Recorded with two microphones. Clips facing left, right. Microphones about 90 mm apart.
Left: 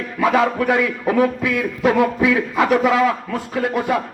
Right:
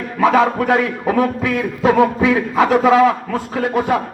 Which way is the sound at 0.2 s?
30° right (ahead or behind).